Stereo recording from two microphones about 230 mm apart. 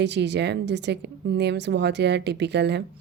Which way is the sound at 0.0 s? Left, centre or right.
Right.